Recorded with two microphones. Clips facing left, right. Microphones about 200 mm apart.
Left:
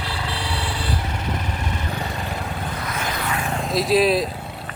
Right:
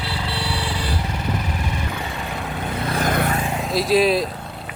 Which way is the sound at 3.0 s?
50° right (ahead or behind).